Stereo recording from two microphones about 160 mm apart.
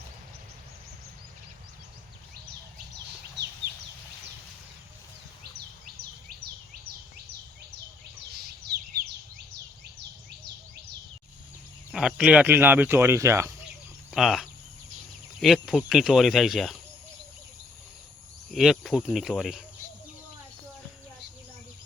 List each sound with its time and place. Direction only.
3.4 s a sound: 90° right
5.4 s insect: 80° right
11.9 s speech: 5° right (ahead or behind)
14.1 s speech: centre (ahead or behind)
18.5 s speech: centre (ahead or behind)